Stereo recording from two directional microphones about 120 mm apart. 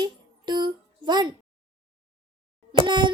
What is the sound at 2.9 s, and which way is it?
Plop, 40° right (ahead or behind).